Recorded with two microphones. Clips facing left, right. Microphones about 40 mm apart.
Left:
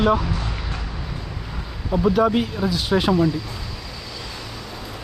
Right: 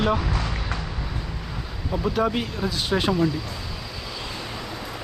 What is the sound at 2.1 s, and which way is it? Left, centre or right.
Speech, centre.